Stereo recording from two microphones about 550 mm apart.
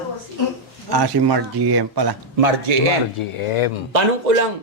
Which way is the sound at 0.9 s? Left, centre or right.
Right.